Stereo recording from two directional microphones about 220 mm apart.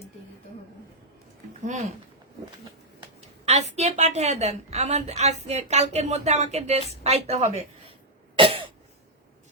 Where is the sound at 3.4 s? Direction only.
30° right (ahead or behind).